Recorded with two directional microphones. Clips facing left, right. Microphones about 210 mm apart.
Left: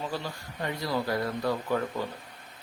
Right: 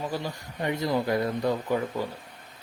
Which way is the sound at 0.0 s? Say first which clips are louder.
Right 3 dB; 15° right (ahead or behind).